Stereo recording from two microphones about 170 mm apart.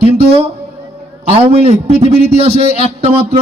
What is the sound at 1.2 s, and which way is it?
A man's voice, 35° right (ahead or behind).